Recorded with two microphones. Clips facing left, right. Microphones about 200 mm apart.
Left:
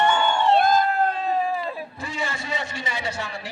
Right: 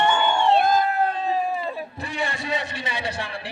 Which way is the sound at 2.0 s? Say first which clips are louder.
Right 2 dB; 60° right (ahead or behind).